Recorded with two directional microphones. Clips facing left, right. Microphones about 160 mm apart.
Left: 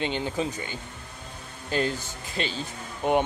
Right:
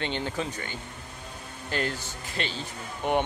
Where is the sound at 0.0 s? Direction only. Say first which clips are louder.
Left 3 dB; 15° left (ahead or behind).